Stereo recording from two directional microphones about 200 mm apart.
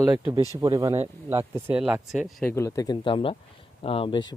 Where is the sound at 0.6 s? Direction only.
15° right (ahead or behind).